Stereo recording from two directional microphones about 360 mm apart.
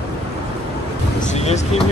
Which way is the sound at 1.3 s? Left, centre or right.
Centre.